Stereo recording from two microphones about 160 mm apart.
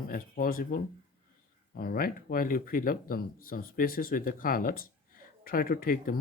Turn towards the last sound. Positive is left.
turn(degrees=65)  # may be behind; listen again after turning